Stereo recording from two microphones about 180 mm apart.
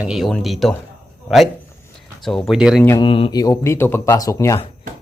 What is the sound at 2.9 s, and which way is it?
Speech, 25° left (ahead or behind).